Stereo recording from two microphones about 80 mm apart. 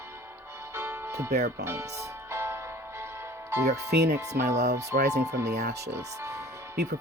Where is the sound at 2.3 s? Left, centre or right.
Right.